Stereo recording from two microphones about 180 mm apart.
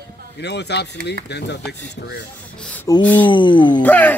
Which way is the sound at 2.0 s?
60° left (ahead or behind).